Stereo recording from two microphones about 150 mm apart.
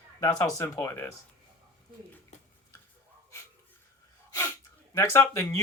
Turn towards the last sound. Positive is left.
turn(degrees=20)  # may be behind; listen again after turning